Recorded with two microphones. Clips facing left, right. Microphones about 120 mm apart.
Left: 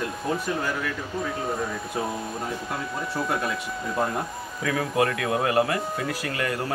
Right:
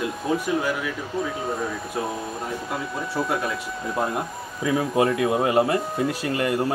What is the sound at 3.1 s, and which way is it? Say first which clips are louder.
Speech: right 2 dB; centre (ahead or behind).